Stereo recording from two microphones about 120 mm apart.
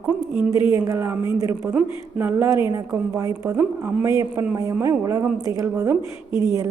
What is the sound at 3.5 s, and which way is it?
Speech, 15° right (ahead or behind).